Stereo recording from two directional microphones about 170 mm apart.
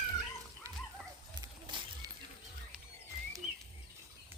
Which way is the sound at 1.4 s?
25° right (ahead or behind).